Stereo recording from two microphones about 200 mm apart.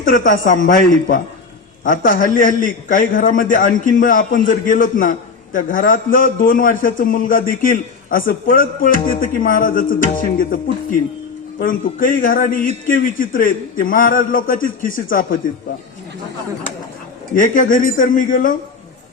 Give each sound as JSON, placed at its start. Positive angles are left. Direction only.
{"t": 0.0, "sound": "a man's voice", "side_deg": 40}
{"t": 17.3, "sound": "a man's voice", "side_deg": 40}